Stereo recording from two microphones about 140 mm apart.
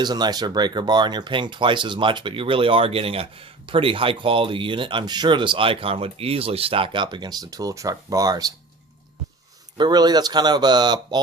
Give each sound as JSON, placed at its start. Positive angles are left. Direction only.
{"t": 0.0, "sound": "speech", "side_deg": -30}
{"t": 9.7, "sound": "speech", "side_deg": -30}